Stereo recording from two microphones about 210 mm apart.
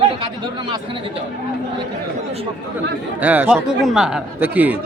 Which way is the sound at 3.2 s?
10° right (ahead or behind).